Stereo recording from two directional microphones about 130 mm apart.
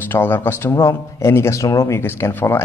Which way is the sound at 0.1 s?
15° left (ahead or behind).